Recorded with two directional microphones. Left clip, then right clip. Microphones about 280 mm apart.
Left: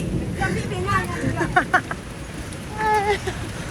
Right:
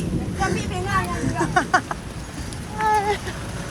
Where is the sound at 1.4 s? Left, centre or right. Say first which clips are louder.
Left 1 dB; centre.